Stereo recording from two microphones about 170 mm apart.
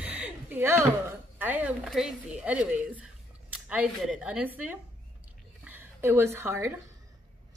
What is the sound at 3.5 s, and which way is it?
Speech, 10° right (ahead or behind).